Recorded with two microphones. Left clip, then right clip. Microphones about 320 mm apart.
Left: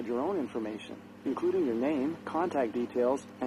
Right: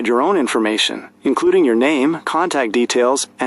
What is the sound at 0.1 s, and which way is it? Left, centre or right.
Speech, right.